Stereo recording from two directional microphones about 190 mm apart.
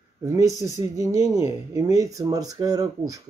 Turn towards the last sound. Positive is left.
turn(degrees=-20)  # may be behind; listen again after turning